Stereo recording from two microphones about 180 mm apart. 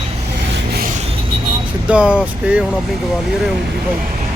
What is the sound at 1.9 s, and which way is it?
Speech, 5° right (ahead or behind).